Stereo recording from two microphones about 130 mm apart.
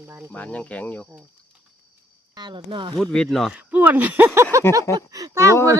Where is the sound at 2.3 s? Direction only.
35° right (ahead or behind).